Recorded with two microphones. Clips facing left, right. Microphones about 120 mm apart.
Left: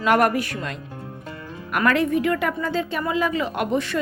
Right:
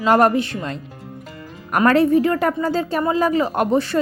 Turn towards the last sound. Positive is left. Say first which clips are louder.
# right 5 dB
turn(degrees=-35)  # may be behind; listen again after turning